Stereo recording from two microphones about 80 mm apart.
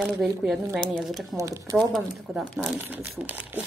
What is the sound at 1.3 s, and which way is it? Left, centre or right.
Speech, right.